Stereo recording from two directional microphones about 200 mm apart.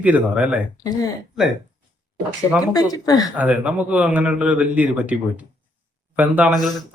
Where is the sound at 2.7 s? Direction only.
20° left (ahead or behind).